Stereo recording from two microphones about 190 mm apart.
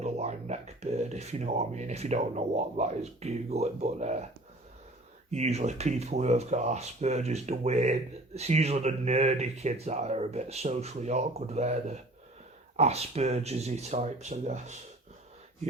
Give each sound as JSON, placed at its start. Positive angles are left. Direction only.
{"t": 0.0, "sound": "speech", "side_deg": -35}
{"t": 5.3, "sound": "speech", "side_deg": -35}